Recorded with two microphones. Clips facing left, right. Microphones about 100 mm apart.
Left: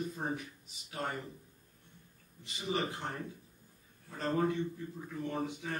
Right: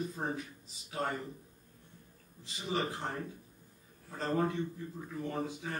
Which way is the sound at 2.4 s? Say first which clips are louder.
Even; 30° right (ahead or behind).